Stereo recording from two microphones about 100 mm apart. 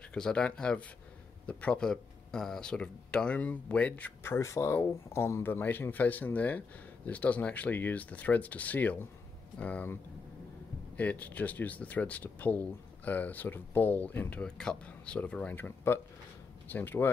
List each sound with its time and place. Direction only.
0.1 s speech: 10° left (ahead or behind)
11.0 s speech: 15° left (ahead or behind)
14.4 s speech: 5° left (ahead or behind)